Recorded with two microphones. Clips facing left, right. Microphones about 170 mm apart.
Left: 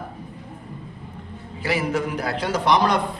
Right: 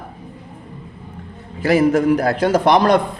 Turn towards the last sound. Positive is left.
turn(degrees=-50)  # may be behind; listen again after turning